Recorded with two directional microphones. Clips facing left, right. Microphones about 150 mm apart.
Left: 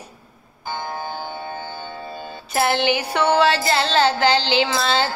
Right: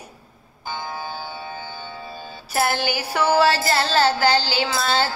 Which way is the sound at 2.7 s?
5° right (ahead or behind).